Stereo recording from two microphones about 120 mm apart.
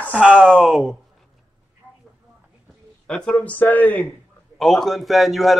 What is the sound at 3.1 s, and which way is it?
Speech, 5° left (ahead or behind).